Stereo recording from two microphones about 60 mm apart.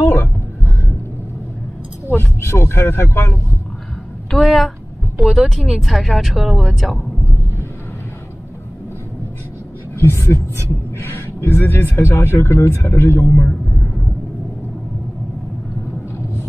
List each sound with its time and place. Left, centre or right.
2.1 s speech: left
4.3 s speech: centre
6.7 s speech: centre
9.9 s speech: left
12.2 s speech: left